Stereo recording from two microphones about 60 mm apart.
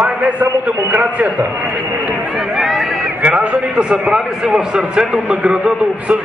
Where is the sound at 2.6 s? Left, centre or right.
Centre.